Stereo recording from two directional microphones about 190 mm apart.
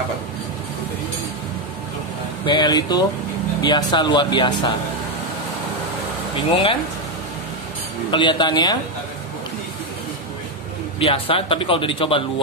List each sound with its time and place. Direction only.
2.4 s a man's voice: 25° left (ahead or behind)
6.5 s a man's voice: 30° left (ahead or behind)
8.1 s a man's voice: 25° left (ahead or behind)
11.0 s a man's voice: 30° left (ahead or behind)